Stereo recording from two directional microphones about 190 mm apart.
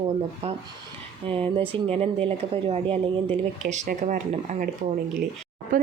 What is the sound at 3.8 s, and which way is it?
Speech, 45° right (ahead or behind).